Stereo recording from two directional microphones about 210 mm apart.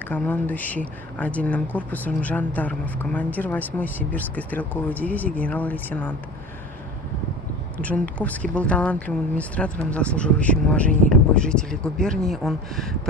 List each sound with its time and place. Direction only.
0.1 s speech: 10° left (ahead or behind)
8.2 s speech: 5° left (ahead or behind)